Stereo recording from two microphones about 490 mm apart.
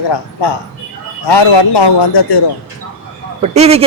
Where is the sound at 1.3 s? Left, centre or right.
Left.